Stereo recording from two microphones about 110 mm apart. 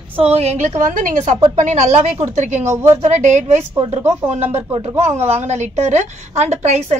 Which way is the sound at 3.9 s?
80° right.